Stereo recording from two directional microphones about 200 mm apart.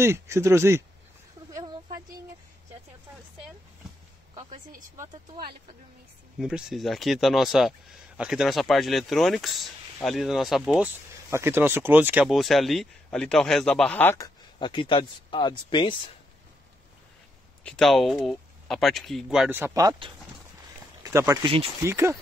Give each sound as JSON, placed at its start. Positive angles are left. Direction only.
{"t": 0.0, "sound": "speech", "side_deg": -15}
{"t": 1.5, "sound": "a sound", "side_deg": -20}
{"t": 4.9, "sound": "speech", "side_deg": -15}
{"t": 6.3, "sound": "speech", "side_deg": 0}
{"t": 11.2, "sound": "speech", "side_deg": -10}
{"t": 17.6, "sound": "speech", "side_deg": 0}